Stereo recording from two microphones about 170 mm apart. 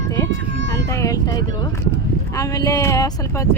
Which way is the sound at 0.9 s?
20° left (ahead or behind).